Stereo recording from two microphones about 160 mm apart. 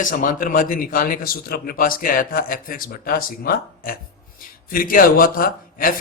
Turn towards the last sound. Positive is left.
turn(degrees=65)  # may be behind; listen again after turning